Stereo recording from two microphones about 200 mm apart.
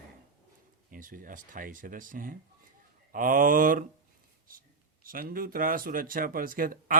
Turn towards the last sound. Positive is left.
turn(degrees=-45)  # may be behind; listen again after turning